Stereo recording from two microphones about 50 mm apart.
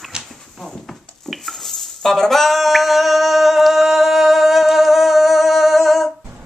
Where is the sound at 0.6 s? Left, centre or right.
Centre.